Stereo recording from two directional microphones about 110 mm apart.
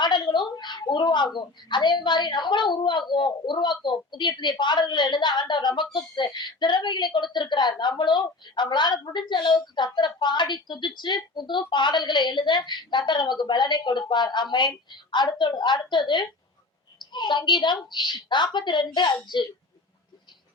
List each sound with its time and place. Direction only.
0.0 s a woman's voice: 45° left (ahead or behind)